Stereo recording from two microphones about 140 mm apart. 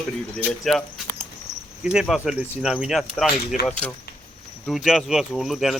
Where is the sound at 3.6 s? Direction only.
10° left (ahead or behind).